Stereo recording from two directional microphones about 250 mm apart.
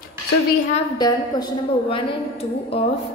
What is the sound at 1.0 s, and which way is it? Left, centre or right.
A woman's voice, centre.